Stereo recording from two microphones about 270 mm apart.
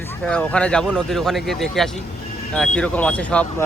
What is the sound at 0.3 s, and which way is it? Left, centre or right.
Speech, centre.